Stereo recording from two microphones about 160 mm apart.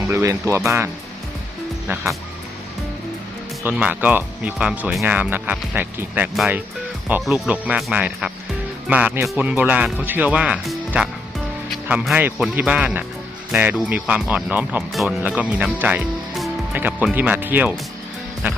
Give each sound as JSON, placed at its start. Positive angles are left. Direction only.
{"t": 0.1, "sound": "speech", "side_deg": -20}
{"t": 3.6, "sound": "speech", "side_deg": -10}
{"t": 15.8, "sound": "music", "side_deg": -5}
{"t": 16.7, "sound": "speech", "side_deg": -10}